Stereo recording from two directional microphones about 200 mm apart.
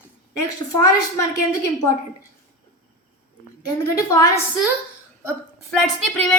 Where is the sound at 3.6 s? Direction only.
15° left (ahead or behind).